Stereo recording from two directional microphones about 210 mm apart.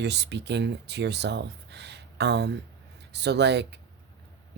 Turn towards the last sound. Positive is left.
turn(degrees=-55)  # may be behind; listen again after turning